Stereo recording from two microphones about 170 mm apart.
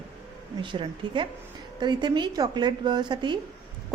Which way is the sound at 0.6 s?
30° right (ahead or behind).